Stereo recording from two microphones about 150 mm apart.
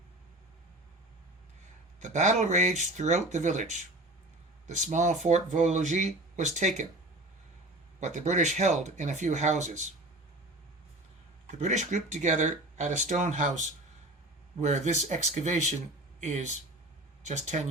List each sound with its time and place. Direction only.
2.0 s speech: 55° right (ahead or behind)
8.0 s speech: 55° right (ahead or behind)
11.4 s speech: 50° right (ahead or behind)